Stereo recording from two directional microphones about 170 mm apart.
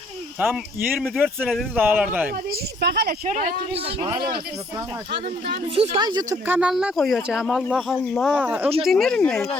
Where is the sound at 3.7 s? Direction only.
35° right (ahead or behind); by 5.0 s 20° right (ahead or behind).